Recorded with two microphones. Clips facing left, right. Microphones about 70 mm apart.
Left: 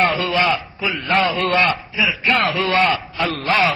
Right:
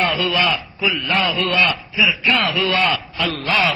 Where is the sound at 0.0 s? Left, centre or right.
Left.